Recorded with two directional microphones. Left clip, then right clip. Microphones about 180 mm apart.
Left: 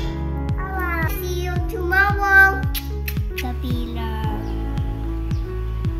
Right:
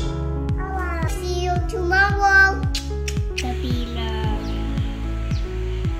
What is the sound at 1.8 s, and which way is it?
Music, 15° left (ahead or behind).